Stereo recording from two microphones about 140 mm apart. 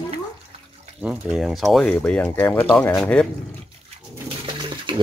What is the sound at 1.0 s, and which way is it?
A man's voice, 5° right (ahead or behind).